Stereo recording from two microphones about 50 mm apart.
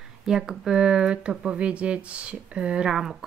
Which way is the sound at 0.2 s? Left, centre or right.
Centre.